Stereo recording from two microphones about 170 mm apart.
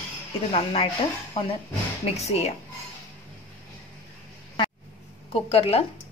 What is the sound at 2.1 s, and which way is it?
Speech, 40° left (ahead or behind).